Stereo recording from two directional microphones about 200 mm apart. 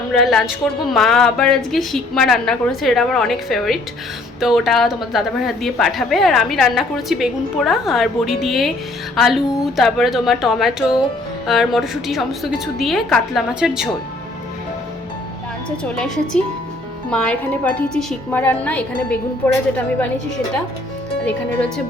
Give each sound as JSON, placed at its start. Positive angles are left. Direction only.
{"t": 0.1, "sound": "a woman's voice", "side_deg": 0}
{"t": 15.8, "sound": "a woman's voice", "side_deg": 5}